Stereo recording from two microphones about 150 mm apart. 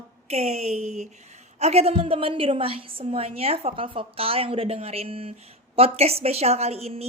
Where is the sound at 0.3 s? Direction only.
45° right (ahead or behind).